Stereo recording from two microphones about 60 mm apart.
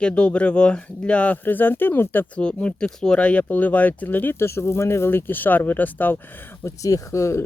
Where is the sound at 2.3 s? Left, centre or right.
Centre.